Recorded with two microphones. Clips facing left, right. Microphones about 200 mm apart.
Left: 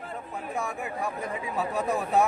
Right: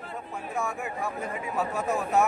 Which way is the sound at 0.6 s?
15° left (ahead or behind).